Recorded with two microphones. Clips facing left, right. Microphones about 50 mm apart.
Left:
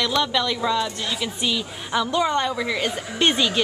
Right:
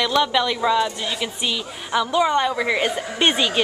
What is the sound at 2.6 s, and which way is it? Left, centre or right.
Speech, right.